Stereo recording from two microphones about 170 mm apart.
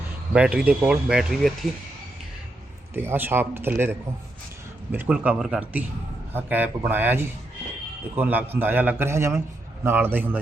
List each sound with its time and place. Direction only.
0.3 s speech: 5° right (ahead or behind)
2.9 s a man's voice: 15° right (ahead or behind)